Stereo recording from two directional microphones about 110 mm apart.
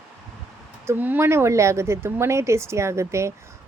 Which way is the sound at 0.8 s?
15° right (ahead or behind).